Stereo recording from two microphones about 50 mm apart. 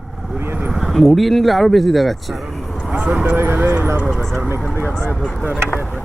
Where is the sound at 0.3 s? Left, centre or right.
Right.